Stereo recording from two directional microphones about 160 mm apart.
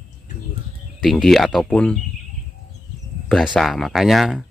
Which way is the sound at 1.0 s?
Centre (ahead or behind).